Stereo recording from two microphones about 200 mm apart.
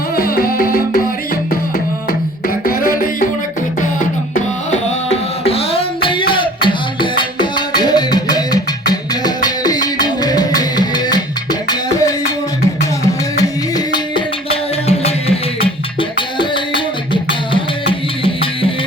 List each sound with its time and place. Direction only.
0.2 s music: 50° left (ahead or behind)
2.6 s music: 45° left (ahead or behind)
4.4 s music: 35° left (ahead or behind)
13.3 s music: 20° left (ahead or behind)
14.5 s music: 30° left (ahead or behind)